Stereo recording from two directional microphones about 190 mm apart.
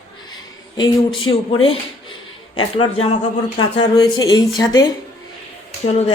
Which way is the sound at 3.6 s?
25° left (ahead or behind).